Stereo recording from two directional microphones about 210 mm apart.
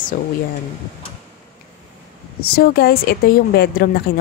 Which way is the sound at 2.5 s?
45° left (ahead or behind).